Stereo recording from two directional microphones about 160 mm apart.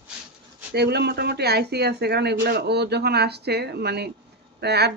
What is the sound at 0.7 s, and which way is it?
Speech, 90° right.